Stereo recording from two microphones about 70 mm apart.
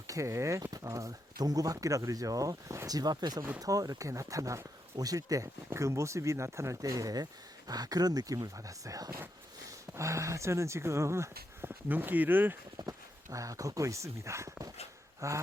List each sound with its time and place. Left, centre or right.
0.1 s speech: right
3.6 s speech: right
5.7 s speech: right
9.9 s speech: right
11.9 s speech: right
12.8 s speech: right
13.3 s speech: right